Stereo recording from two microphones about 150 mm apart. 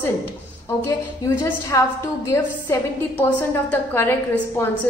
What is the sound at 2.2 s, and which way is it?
A woman's voice, 15° left (ahead or behind).